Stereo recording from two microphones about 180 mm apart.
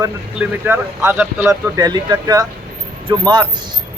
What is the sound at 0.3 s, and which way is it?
Speech, 10° right (ahead or behind).